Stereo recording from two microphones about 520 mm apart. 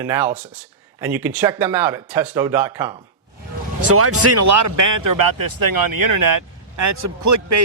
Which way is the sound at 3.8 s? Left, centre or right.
Right.